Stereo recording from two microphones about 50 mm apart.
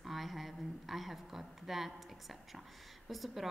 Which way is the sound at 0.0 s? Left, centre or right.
Centre.